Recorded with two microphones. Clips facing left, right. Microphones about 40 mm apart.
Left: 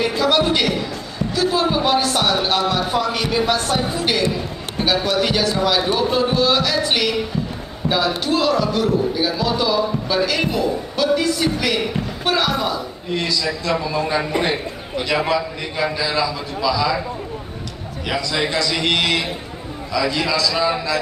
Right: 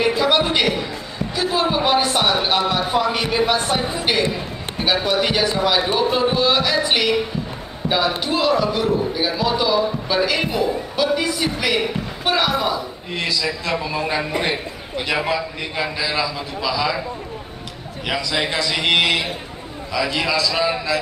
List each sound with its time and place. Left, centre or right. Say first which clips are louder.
0.0 s a sound: even; right
4.8 s a man's voice: even; centre
8.2 s a man's voice: even; centre
18.0 s speech: even; centre